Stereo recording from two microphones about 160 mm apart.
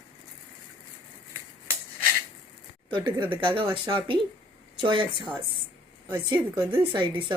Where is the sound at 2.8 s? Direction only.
30° right (ahead or behind).